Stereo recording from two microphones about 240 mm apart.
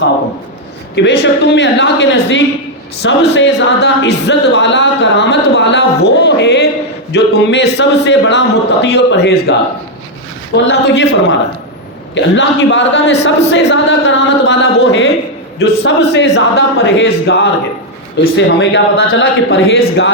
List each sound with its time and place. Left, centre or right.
0.9 s speech: left